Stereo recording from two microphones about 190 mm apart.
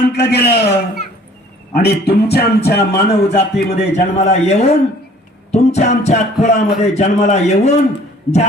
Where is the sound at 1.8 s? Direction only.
55° left (ahead or behind).